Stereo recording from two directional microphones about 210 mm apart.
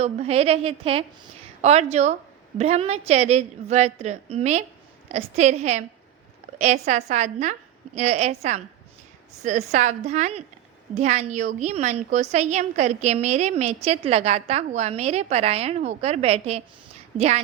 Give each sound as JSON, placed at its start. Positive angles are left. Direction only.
{"t": 0.0, "sound": "a woman's voice", "side_deg": -30}